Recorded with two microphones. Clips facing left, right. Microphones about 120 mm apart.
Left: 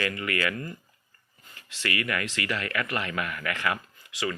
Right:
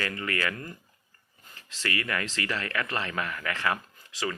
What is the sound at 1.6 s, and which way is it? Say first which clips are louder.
Speech: left 1 dB; 35° right (ahead or behind).